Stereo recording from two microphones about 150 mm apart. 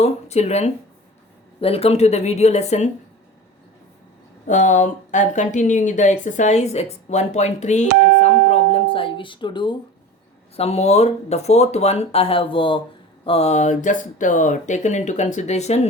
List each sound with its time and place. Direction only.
0.0 s speech: 45° left (ahead or behind)
4.4 s speech: 55° left (ahead or behind); by 9.7 s 30° left (ahead or behind)
10.6 s speech: 45° left (ahead or behind)